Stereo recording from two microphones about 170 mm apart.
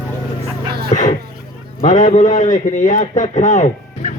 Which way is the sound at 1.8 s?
45° left (ahead or behind).